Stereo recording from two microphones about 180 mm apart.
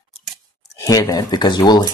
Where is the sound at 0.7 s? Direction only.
20° left (ahead or behind).